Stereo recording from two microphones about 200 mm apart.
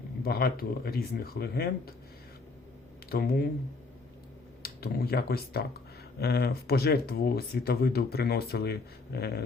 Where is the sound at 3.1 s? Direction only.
50° left (ahead or behind).